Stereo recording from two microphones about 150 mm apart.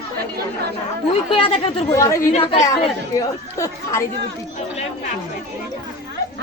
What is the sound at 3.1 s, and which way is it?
Speech, 20° left (ahead or behind).